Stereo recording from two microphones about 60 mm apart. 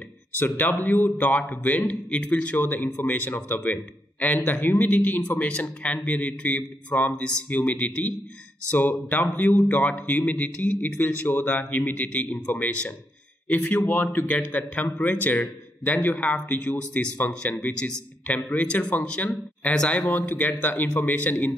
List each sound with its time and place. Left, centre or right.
0.4 s a man's voice: left